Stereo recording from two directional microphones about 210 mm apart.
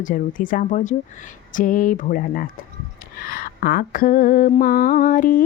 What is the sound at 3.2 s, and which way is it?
Mantra, 45° left (ahead or behind).